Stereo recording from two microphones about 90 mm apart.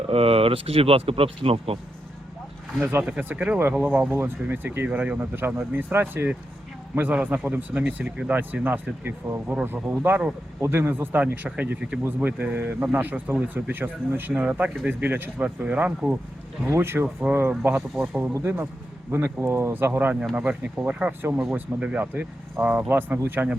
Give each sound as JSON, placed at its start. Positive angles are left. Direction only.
{"t": 0.1, "sound": "speech", "side_deg": -90}
{"t": 3.2, "sound": "speech", "side_deg": -20}
{"t": 16.6, "sound": "speech", "side_deg": -30}
{"t": 17.9, "sound": "speech", "side_deg": -5}
{"t": 18.3, "sound": "speech", "side_deg": -25}